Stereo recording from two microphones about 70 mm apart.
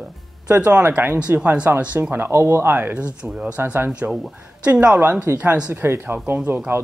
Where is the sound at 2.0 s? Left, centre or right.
Right.